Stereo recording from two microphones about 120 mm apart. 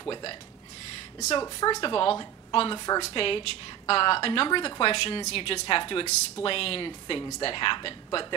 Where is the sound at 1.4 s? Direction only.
30° left (ahead or behind).